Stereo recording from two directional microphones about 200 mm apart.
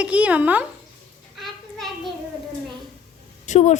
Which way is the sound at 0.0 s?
5° right (ahead or behind).